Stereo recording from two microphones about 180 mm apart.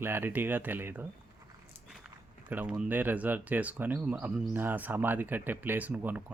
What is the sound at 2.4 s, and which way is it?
Speech, 10° right (ahead or behind).